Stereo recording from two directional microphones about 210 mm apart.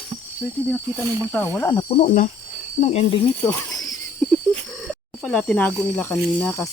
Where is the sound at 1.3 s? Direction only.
10° left (ahead or behind); by 3.1 s 30° left (ahead or behind).